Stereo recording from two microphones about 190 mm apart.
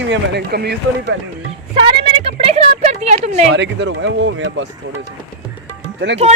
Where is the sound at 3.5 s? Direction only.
70° right (ahead or behind).